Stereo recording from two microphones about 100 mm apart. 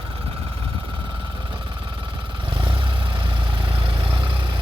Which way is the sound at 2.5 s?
60° right (ahead or behind).